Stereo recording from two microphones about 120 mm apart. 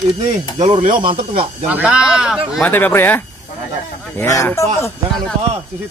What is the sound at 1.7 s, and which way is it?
Speech, 10° right (ahead or behind).